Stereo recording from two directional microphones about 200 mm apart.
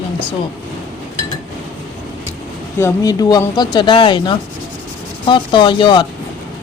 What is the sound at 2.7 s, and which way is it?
Speech, 15° left (ahead or behind).